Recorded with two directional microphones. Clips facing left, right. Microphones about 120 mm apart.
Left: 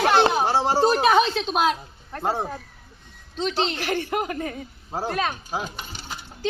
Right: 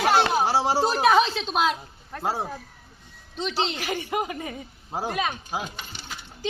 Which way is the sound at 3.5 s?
10° right (ahead or behind).